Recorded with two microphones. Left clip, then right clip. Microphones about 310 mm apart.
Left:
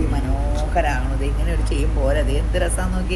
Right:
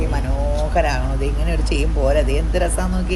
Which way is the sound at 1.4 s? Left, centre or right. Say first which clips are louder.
Right 3 dB; right.